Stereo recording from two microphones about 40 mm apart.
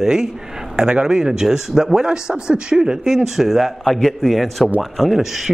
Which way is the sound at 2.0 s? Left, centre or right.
Right.